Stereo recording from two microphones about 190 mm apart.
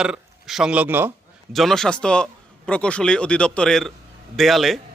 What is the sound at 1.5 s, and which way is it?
A man's voice, centre (ahead or behind).